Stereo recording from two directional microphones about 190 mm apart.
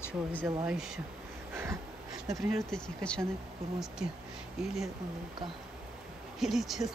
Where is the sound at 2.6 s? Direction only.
5° left (ahead or behind).